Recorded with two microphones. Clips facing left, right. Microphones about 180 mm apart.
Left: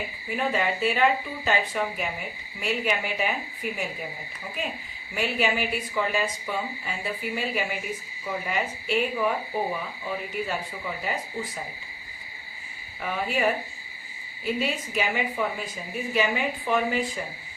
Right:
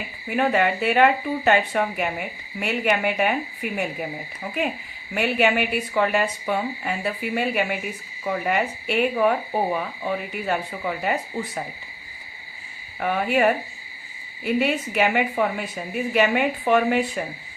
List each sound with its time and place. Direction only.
0.3 s speech: 65° right (ahead or behind)
5.1 s speech: 65° right (ahead or behind)
13.0 s speech: 60° right (ahead or behind)